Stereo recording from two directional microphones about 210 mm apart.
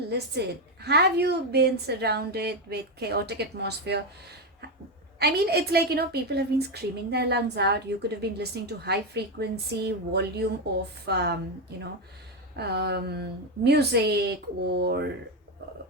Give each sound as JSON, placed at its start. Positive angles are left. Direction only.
{"t": 0.1, "sound": "a woman's voice", "side_deg": -50}
{"t": 12.5, "sound": "a woman's voice", "side_deg": -50}